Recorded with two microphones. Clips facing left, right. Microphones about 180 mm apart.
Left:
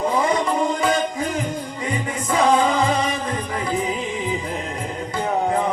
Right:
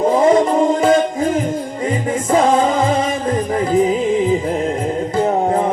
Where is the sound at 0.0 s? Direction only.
45° right (ahead or behind).